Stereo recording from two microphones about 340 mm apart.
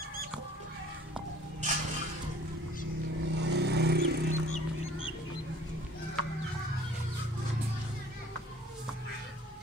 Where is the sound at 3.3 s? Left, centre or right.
Right.